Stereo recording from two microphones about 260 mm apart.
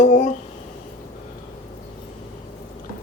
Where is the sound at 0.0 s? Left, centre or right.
Left.